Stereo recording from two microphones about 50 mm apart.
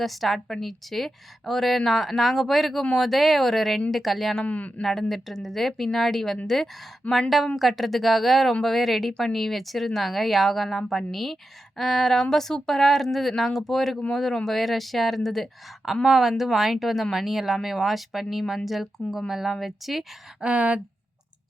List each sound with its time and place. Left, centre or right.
0.0 s a woman's voice: centre
4.4 s speech: left
4.8 s a woman's voice: centre
20.4 s speech: right